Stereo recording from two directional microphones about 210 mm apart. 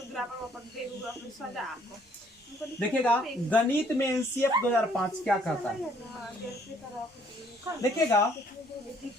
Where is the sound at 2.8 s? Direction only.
5° left (ahead or behind).